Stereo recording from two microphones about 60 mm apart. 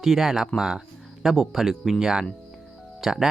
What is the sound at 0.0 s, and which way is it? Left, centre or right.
Speech, centre.